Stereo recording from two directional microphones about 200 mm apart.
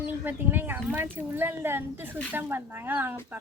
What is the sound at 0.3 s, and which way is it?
Speech, 10° right (ahead or behind).